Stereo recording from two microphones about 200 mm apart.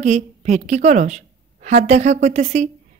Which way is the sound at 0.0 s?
35° right (ahead or behind).